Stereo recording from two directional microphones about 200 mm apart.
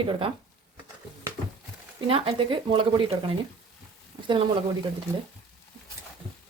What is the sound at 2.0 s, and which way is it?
A woman's voice, 25° right (ahead or behind).